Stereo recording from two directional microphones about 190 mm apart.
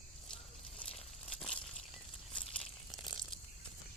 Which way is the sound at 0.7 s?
30° left (ahead or behind).